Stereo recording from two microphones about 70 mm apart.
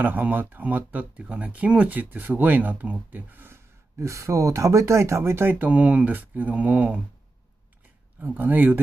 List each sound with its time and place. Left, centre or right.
0.0 s speech: right
8.2 s speech: right